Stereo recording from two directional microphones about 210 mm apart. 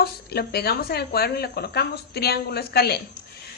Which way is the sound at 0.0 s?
50° left (ahead or behind).